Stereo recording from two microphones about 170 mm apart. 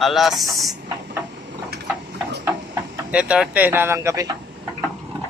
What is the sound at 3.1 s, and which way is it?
Speech, 5° right (ahead or behind).